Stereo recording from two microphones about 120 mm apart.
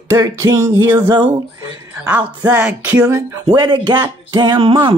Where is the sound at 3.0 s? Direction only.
30° right (ahead or behind).